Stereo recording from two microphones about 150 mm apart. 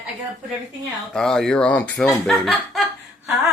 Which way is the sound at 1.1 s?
5° left (ahead or behind).